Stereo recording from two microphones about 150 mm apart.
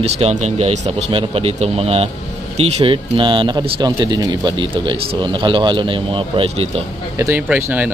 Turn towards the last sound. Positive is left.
turn(degrees=-10)  # may be behind; listen again after turning